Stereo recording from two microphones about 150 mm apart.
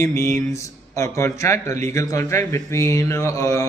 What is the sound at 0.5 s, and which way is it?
A man's voice, 20° left (ahead or behind).